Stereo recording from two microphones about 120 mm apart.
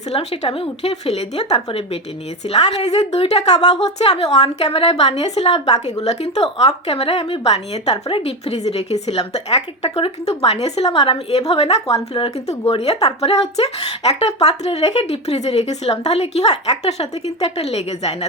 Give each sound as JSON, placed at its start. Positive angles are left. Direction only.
{"t": 0.1, "sound": "a woman's voice", "side_deg": 60}
{"t": 7.4, "sound": "a woman's voice", "side_deg": 60}